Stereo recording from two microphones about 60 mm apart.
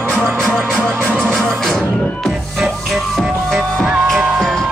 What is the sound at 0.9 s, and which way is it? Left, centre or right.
Music, right.